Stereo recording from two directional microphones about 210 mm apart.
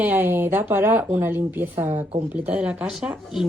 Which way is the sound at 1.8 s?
25° right (ahead or behind).